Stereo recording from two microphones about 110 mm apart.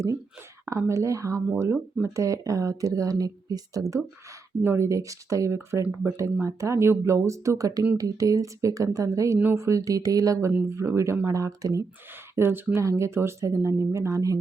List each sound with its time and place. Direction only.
0.6 s speech: 25° right (ahead or behind)